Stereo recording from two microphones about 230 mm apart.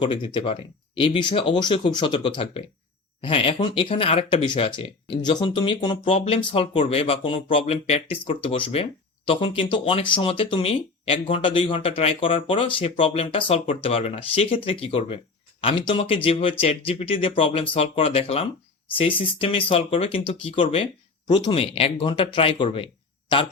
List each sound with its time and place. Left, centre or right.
0.0 s speech: left